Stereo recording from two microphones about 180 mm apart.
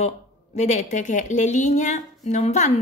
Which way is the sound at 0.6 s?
40° left (ahead or behind).